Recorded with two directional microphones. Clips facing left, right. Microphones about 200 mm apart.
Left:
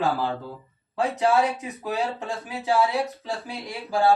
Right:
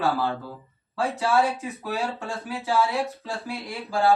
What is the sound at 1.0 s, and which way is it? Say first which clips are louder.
Speech: left 1 dB; 15° left (ahead or behind).